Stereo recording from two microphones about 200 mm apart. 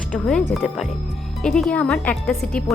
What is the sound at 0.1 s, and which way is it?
Speech, 5° left (ahead or behind).